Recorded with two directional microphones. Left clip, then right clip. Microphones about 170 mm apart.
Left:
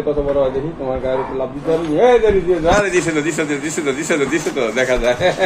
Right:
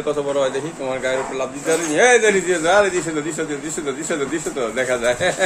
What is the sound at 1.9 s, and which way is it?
Speech, 10° right (ahead or behind).